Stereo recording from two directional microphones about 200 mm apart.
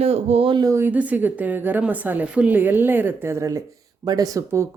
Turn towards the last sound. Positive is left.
turn(degrees=-15)  # may be behind; listen again after turning